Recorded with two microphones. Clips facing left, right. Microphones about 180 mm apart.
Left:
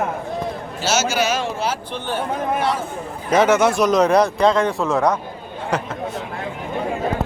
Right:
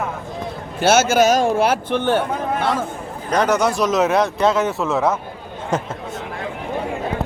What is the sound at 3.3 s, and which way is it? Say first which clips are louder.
Speech: left 2 dB; 5° left (ahead or behind).